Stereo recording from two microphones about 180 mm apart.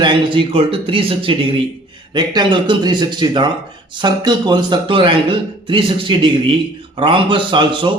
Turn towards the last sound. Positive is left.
turn(degrees=-25)  # may be behind; listen again after turning